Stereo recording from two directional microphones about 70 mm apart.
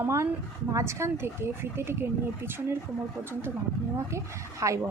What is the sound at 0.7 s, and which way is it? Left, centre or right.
Speech, right.